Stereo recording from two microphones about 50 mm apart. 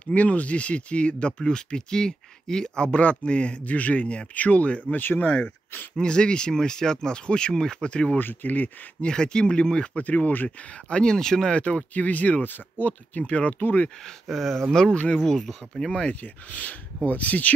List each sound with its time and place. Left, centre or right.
0.0 s speech: left
4.9 s speech: left
5.2 s speech: left
8.2 s speech: left
9.0 s speech: centre
10.0 s speech: left
10.9 s speech: centre
11.5 s speech: left
14.2 s speech: centre
16.1 s speech: left